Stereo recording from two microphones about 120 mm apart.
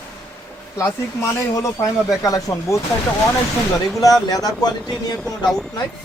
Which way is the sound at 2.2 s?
30° left (ahead or behind).